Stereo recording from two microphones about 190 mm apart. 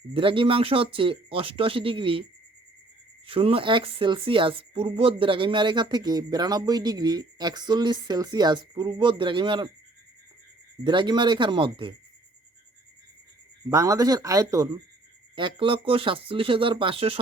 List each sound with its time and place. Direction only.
0.1 s speech: 30° right (ahead or behind)
3.2 s speech: 30° right (ahead or behind)
10.8 s speech: 25° right (ahead or behind)
13.7 s speech: 15° right (ahead or behind)